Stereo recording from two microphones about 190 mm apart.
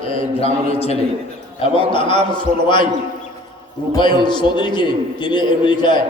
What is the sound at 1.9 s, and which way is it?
Speech, 25° left (ahead or behind).